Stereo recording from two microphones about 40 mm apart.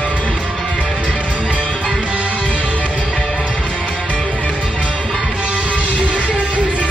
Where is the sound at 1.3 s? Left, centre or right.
Right.